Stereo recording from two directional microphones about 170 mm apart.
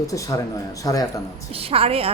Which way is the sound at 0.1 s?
20° left (ahead or behind).